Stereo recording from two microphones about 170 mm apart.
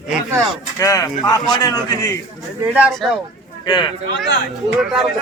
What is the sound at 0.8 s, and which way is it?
Speech, 20° left (ahead or behind).